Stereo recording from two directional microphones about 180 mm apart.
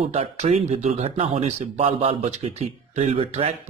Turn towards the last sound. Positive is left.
turn(degrees=-35)  # may be behind; listen again after turning